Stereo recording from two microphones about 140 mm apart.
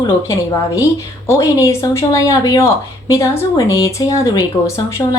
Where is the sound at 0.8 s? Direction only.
20° left (ahead or behind).